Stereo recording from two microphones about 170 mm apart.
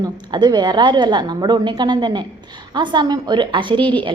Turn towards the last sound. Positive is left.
turn(degrees=-30)  # may be behind; listen again after turning